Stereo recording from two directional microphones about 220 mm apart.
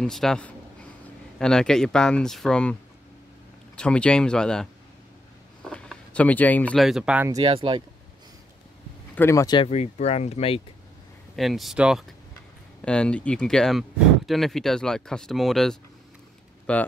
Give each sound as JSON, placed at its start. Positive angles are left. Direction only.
{"t": 0.0, "sound": "speech", "side_deg": 0}
{"t": 7.4, "sound": "speech", "side_deg": -25}
{"t": 9.1, "sound": "speech", "side_deg": 10}
{"t": 11.3, "sound": "speech", "side_deg": 0}